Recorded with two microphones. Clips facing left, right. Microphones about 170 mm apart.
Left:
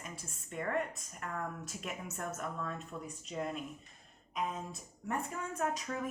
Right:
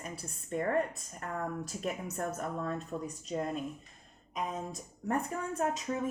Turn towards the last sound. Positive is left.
turn(degrees=-20)  # may be behind; listen again after turning